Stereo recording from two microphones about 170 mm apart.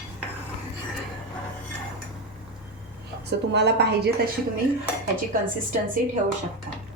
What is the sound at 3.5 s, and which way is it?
Speech, 80° right.